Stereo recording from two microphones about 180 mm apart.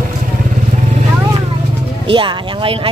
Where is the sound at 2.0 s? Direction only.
30° right (ahead or behind).